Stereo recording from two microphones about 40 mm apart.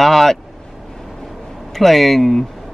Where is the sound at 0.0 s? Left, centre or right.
Centre.